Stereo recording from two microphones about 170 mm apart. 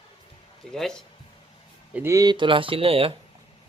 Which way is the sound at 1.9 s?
15° right (ahead or behind).